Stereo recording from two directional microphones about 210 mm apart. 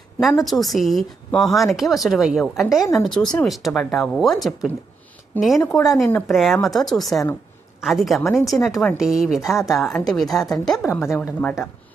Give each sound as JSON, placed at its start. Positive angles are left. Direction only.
{"t": 0.4, "sound": "speech", "side_deg": 0}
{"t": 8.2, "sound": "speech", "side_deg": 10}
{"t": 8.6, "sound": "speech", "side_deg": 0}
{"t": 10.8, "sound": "speech", "side_deg": 15}